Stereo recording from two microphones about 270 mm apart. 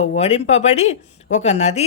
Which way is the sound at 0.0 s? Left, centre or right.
Left.